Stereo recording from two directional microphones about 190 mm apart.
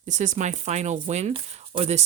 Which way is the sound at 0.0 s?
40° right (ahead or behind).